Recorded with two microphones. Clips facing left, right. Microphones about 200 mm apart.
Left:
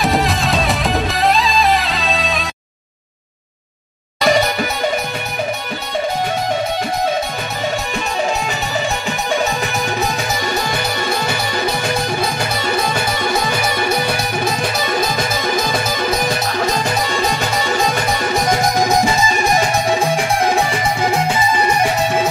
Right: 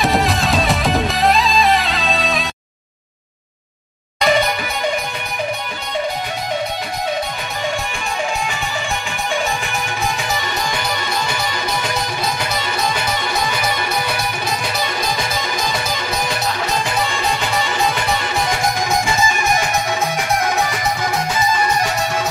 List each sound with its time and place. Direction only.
0.0 s music: centre (ahead or behind)
4.2 s music: 45° left (ahead or behind)
10.4 s music: 45° left (ahead or behind)
19.9 s music: 30° left (ahead or behind)